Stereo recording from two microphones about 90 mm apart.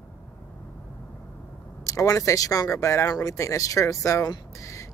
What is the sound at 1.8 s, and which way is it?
Speech, 35° left (ahead or behind).